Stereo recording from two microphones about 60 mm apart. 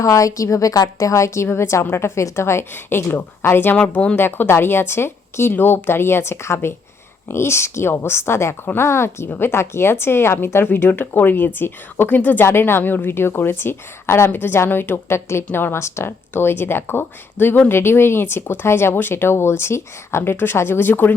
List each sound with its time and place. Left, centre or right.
0.0 s a woman's voice: left
2.7 s speech: left
4.1 s speech: left
12.5 s speech: left